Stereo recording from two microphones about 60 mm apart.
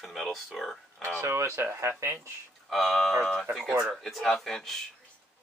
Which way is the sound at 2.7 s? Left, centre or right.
Centre.